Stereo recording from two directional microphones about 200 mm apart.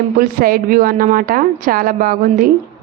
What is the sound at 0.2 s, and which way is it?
A woman's voice, 45° right (ahead or behind).